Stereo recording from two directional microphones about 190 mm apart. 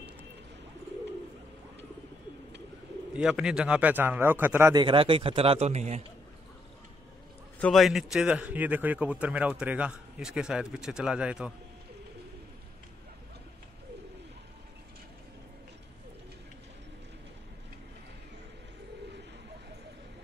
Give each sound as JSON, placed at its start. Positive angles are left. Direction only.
{"t": 3.1, "sound": "a man's voice", "side_deg": -5}
{"t": 4.8, "sound": "speech", "side_deg": -25}
{"t": 7.5, "sound": "a man's voice", "side_deg": 0}